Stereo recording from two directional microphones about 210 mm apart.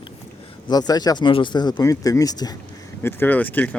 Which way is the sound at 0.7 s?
20° left (ahead or behind).